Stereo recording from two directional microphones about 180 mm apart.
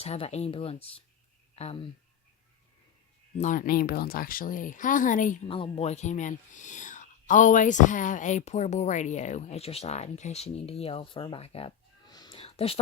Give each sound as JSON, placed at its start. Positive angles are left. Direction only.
{"t": 0.0, "sound": "speech", "side_deg": 35}
{"t": 3.3, "sound": "speech", "side_deg": 45}
{"t": 5.5, "sound": "speech", "side_deg": 30}